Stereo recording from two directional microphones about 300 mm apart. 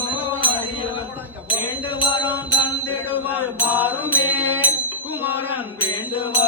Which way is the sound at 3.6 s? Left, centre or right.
Centre.